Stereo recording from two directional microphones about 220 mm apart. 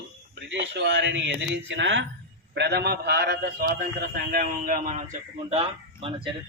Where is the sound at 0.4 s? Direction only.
55° right (ahead or behind); by 4.9 s 35° right (ahead or behind).